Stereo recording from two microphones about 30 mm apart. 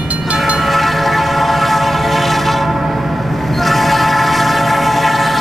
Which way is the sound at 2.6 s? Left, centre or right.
Centre.